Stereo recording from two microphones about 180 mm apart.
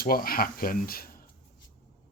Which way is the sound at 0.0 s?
55° left (ahead or behind).